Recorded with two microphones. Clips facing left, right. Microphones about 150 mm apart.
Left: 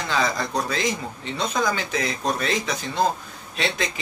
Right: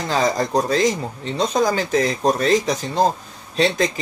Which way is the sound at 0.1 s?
40° right (ahead or behind).